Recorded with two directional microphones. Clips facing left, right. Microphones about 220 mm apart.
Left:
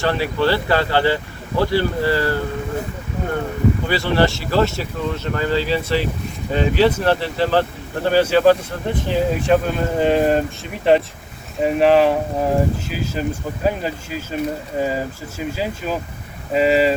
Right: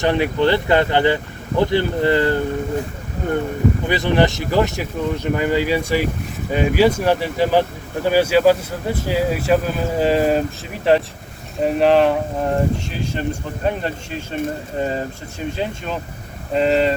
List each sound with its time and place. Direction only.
0.0 s speech: 20° right (ahead or behind)
3.8 s speech: 20° right (ahead or behind); by 16.9 s 5° left (ahead or behind)